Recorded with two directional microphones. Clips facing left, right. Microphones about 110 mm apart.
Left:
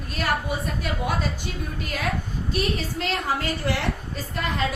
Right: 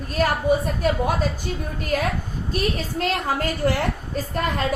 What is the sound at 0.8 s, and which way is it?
Speech, 45° right (ahead or behind).